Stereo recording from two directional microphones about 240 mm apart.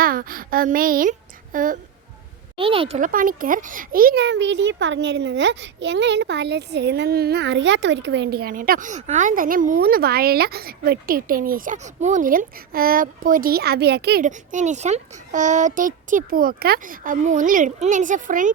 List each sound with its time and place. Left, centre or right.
0.0 s a child's voice: right
2.6 s a child's voice: right